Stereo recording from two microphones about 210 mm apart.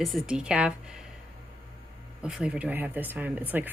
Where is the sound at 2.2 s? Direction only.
5° right (ahead or behind).